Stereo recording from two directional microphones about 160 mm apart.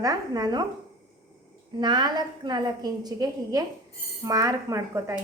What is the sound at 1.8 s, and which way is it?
A woman's voice, 25° right (ahead or behind).